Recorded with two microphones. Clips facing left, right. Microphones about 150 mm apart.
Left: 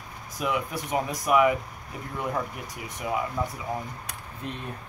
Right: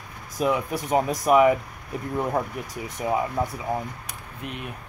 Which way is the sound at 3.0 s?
30° right (ahead or behind).